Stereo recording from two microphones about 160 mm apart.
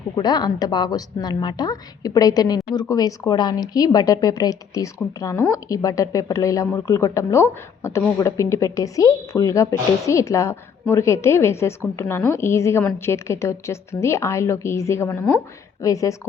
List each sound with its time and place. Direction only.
0.2 s a woman's voice: 25° left (ahead or behind)